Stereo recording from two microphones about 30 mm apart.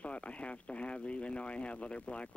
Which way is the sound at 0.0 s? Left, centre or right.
Left.